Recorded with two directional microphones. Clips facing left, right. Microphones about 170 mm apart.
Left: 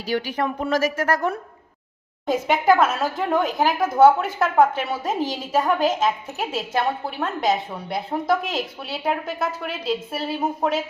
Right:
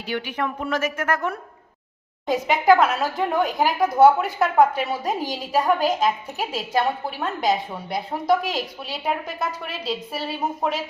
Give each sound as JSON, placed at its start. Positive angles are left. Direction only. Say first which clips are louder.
{"t": 0.1, "sound": "speech", "louder": "left 3 dB", "side_deg": 35}
{"t": 2.2, "sound": "speech", "louder": "even", "side_deg": 0}